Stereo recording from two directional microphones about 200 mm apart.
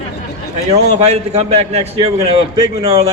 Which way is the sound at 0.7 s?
35° right (ahead or behind).